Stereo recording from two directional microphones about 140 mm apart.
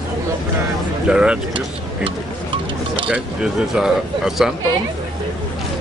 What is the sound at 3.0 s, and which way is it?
Speech, 5° right (ahead or behind).